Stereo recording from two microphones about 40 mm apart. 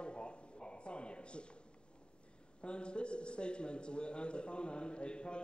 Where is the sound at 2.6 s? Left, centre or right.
Left.